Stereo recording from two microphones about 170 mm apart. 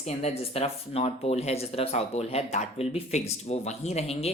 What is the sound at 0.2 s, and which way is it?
Speech, 40° left (ahead or behind).